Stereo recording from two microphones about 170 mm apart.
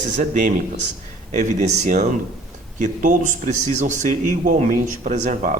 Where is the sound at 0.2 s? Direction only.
50° right (ahead or behind).